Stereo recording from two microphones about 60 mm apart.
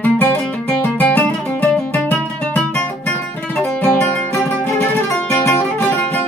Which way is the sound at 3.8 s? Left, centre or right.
Left.